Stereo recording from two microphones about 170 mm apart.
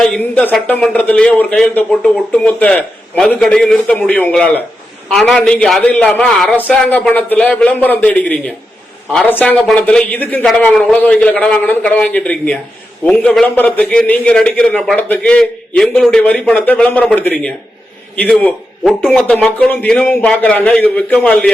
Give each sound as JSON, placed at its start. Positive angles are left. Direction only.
{"t": 0.0, "sound": "a man's voice", "side_deg": 5}